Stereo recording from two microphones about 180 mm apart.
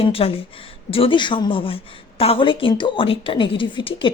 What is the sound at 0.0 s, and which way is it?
A woman's voice, 30° left (ahead or behind).